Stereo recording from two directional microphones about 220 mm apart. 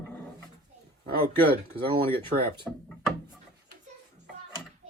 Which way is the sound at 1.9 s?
25° right (ahead or behind).